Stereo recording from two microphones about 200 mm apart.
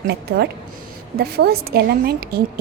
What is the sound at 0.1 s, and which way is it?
A woman's voice, 50° right (ahead or behind).